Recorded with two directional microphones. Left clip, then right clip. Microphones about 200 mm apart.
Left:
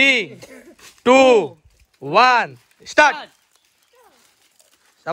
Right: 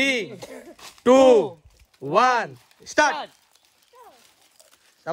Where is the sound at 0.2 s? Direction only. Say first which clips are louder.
Left 5 dB; 50° right (ahead or behind).